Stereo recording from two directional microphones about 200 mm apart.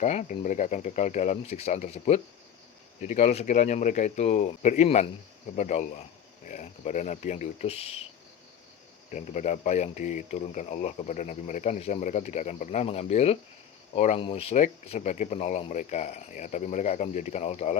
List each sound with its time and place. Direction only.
0.0 s speech: 35° left (ahead or behind)
9.0 s speech: 35° left (ahead or behind)